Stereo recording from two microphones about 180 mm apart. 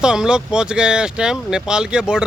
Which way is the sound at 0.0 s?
5° right (ahead or behind).